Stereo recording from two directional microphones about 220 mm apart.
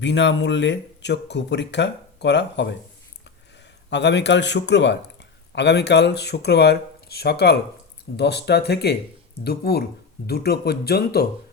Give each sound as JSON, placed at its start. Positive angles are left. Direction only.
{"t": 0.0, "sound": "speech", "side_deg": 55}
{"t": 3.8, "sound": "speech", "side_deg": 50}